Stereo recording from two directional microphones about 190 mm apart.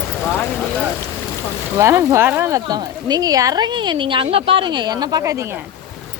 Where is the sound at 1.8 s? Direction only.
15° right (ahead or behind).